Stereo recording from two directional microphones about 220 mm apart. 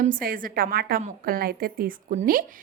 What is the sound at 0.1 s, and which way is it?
A woman's voice, 40° right (ahead or behind).